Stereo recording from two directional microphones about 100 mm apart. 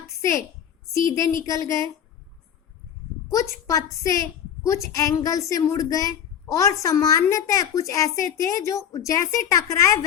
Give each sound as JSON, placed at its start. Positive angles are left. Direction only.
{"t": 0.2, "sound": "a woman's voice", "side_deg": 30}
{"t": 3.2, "sound": "a woman's voice", "side_deg": 30}